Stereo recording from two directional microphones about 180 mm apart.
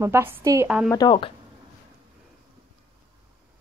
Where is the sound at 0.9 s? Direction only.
20° left (ahead or behind).